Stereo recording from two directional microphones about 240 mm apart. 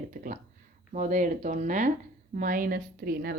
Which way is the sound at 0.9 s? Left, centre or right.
Right.